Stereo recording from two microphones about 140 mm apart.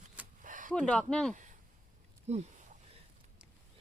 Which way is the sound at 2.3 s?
55° right (ahead or behind).